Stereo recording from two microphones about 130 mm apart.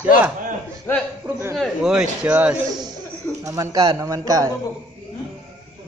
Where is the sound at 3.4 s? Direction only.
25° right (ahead or behind).